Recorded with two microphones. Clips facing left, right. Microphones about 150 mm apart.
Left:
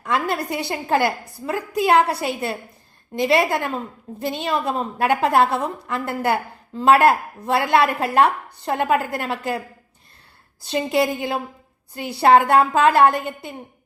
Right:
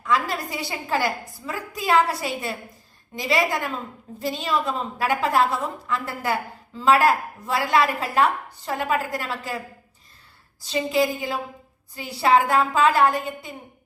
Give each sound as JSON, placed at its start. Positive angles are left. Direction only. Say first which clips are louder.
{"t": 0.0, "sound": "a woman's voice", "louder": "left 2 dB", "side_deg": 60}
{"t": 10.7, "sound": "a woman's voice", "louder": "left 2 dB", "side_deg": 60}